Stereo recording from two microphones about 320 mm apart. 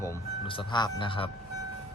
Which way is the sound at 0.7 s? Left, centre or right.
Centre.